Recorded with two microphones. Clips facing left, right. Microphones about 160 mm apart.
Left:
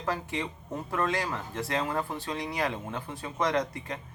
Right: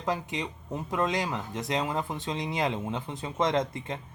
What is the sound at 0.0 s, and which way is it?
Speech, 20° right (ahead or behind).